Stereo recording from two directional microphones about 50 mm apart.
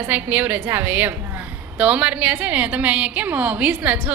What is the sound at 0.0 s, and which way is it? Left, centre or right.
A woman's voice, right.